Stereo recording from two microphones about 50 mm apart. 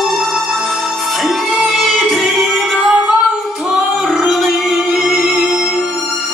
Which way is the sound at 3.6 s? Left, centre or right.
Centre.